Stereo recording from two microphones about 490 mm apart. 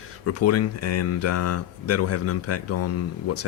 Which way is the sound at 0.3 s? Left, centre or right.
Left.